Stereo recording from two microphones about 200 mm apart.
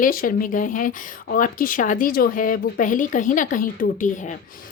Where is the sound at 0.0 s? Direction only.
45° left (ahead or behind).